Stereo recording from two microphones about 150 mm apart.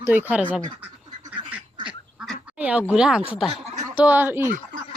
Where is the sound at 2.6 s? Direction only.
10° right (ahead or behind).